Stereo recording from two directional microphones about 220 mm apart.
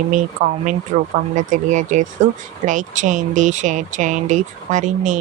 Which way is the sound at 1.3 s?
35° right (ahead or behind).